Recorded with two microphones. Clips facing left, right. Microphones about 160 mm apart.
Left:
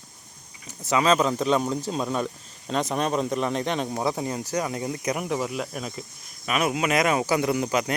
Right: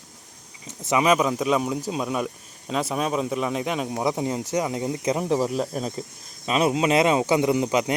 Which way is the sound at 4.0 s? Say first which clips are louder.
Right 2 dB; 15° right (ahead or behind).